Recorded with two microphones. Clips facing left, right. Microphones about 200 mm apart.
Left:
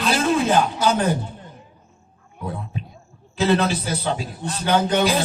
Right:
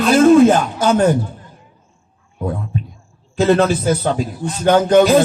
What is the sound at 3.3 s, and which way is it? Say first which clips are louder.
Music: right 6 dB; 50° right (ahead or behind).